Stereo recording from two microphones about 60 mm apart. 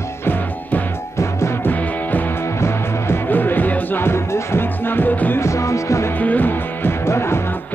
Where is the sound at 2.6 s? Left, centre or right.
Left.